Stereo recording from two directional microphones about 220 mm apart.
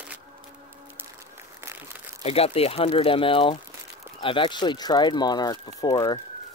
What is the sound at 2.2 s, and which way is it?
Speech, 25° left (ahead or behind).